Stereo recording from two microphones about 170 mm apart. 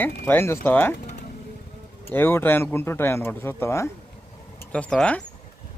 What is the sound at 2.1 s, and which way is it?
Speech, 15° left (ahead or behind).